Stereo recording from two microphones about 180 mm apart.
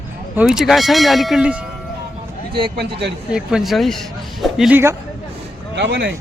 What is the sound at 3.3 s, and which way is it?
Speech, 5° right (ahead or behind).